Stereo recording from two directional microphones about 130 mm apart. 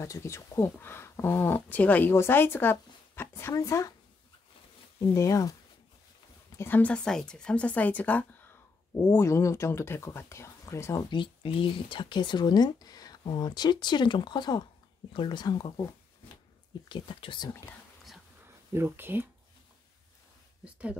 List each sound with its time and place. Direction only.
0.0 s speech: 20° left (ahead or behind)
5.1 s speech: 25° left (ahead or behind)
6.6 s speech: 10° left (ahead or behind)
11.1 s speech: 40° left (ahead or behind)
16.9 s speech: 40° left (ahead or behind)
18.7 s speech: 15° right (ahead or behind)
20.6 s speech: 10° right (ahead or behind)